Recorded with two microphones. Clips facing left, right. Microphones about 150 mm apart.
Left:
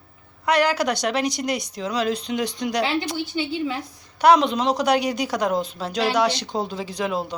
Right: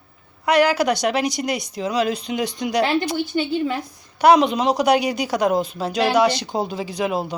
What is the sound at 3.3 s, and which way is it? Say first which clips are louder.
Speech: right 3 dB; 50° right (ahead or behind).